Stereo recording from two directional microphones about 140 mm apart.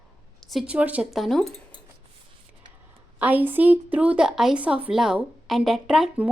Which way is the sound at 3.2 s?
10° right (ahead or behind).